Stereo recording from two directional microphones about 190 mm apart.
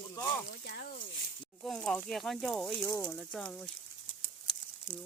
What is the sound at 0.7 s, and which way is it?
Speech, 50° left (ahead or behind).